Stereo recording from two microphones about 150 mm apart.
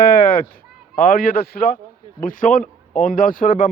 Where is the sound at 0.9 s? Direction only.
70° left (ahead or behind); by 1.7 s 90° left.